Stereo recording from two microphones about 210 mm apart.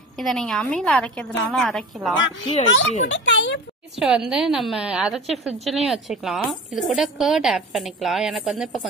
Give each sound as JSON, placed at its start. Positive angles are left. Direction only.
{"t": 0.2, "sound": "a woman's voice", "side_deg": 0}
{"t": 2.4, "sound": "a child's voice", "side_deg": 25}
{"t": 3.1, "sound": "a sound", "side_deg": 60}
{"t": 4.0, "sound": "a woman's voice", "side_deg": 0}